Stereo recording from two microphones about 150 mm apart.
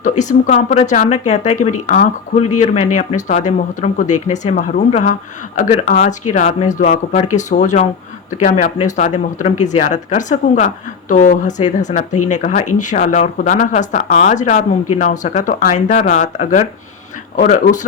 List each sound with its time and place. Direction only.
0.0 s speech: 55° left (ahead or behind)